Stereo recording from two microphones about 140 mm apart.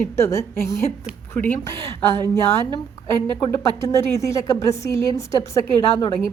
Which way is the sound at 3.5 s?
20° left (ahead or behind).